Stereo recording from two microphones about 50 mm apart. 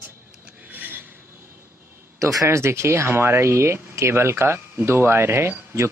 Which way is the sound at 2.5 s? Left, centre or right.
Right.